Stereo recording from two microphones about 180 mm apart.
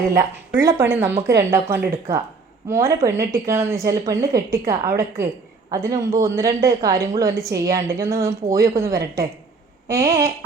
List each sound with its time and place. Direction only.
0.1 s a woman's voice: 15° right (ahead or behind)